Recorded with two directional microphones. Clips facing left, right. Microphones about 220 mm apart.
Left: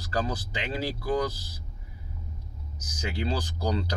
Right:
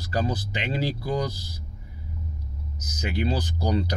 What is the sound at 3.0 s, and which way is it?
Speech, 20° right (ahead or behind).